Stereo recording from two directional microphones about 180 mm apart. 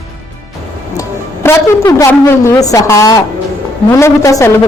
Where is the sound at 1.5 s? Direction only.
15° left (ahead or behind).